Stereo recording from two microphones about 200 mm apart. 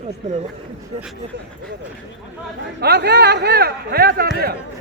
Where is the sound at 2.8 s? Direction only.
55° right (ahead or behind).